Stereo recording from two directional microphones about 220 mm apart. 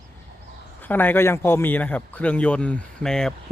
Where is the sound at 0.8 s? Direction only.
10° left (ahead or behind).